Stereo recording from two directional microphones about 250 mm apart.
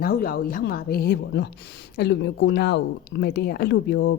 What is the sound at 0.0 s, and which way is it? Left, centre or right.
A woman's voice, left.